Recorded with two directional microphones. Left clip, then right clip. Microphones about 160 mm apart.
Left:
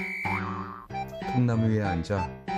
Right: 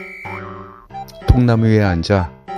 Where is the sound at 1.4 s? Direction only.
50° right (ahead or behind).